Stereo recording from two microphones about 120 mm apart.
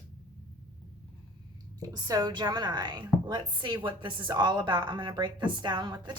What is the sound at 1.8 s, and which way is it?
A woman's voice, 35° right (ahead or behind).